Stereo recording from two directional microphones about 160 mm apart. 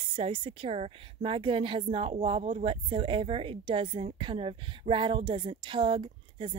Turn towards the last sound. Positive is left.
turn(degrees=-30)  # may be behind; listen again after turning